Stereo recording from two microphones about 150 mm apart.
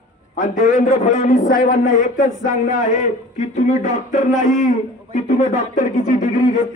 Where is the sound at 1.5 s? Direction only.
60° left (ahead or behind).